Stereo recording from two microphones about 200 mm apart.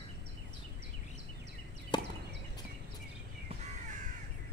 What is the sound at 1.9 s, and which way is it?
Chop, 20° left (ahead or behind).